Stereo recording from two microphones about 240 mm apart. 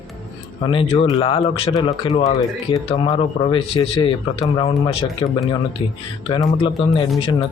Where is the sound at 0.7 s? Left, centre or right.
Left.